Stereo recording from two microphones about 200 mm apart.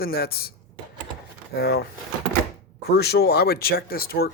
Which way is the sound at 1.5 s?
50° left (ahead or behind).